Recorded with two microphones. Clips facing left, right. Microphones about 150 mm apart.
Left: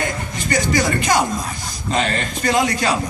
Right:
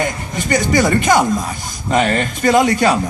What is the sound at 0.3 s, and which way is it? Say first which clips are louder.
Speech: right 4 dB; 50° right (ahead or behind).